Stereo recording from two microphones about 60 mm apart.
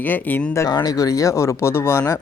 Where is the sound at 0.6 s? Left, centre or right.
Left.